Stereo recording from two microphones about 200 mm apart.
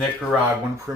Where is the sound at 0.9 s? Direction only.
15° right (ahead or behind).